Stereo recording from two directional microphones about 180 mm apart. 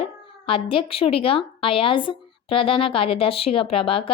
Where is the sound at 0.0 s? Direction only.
30° left (ahead or behind).